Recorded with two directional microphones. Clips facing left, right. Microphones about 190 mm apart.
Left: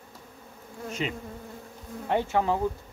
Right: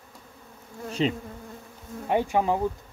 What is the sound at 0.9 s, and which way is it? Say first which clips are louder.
Bee: right 6 dB; 30° right (ahead or behind).